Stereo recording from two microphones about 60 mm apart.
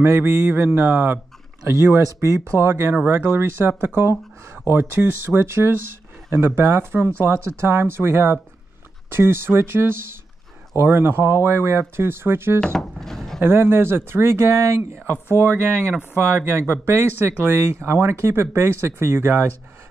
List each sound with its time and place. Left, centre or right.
0.0 s speech: right
2.1 s speech: right
12.5 s speech: centre
13.4 s speech: right
15.3 s speech: right